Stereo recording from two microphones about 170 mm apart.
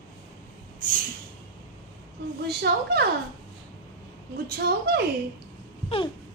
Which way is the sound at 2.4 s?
75° right (ahead or behind).